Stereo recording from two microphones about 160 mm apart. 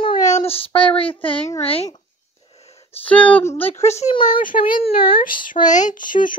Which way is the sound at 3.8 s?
45° left (ahead or behind).